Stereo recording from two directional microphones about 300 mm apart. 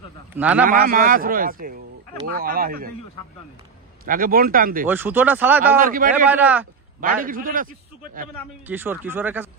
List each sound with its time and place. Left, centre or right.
0.4 s speech: centre
0.7 s a man's voice: right
4.0 s a man's voice: right
4.8 s speech: centre
5.8 s a man's voice: right
6.2 s speech: centre
7.0 s a man's voice: right
8.6 s speech: centre